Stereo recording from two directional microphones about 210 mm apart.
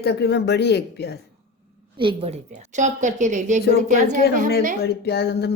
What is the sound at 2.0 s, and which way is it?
A woman's voice, 25° right (ahead or behind).